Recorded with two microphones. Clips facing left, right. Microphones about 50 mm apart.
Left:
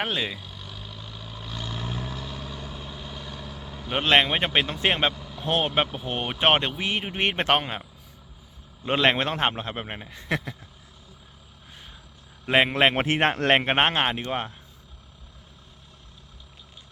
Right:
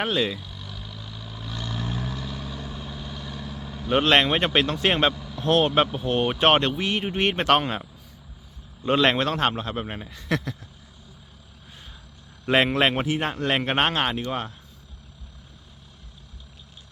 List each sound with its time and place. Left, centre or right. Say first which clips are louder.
0.0 s vehicle: right 3 dB; centre
4.0 s speech: left 1 dB; centre
12.5 s speech: even; centre
13.1 s speech: left 4 dB; left
13.6 s speech: left 1 dB; left